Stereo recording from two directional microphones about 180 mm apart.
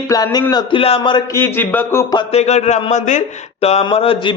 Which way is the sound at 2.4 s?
35° left (ahead or behind).